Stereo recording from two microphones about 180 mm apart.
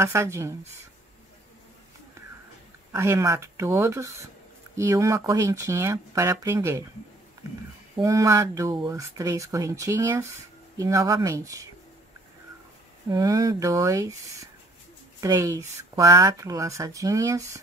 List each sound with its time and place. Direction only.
0.0 s speech: 15° right (ahead or behind)
2.9 s speech: 15° right (ahead or behind)
7.9 s speech: 15° right (ahead or behind)
13.1 s speech: 20° right (ahead or behind)